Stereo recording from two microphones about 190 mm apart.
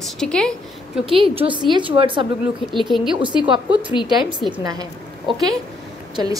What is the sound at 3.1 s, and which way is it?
A woman's voice, 25° right (ahead or behind).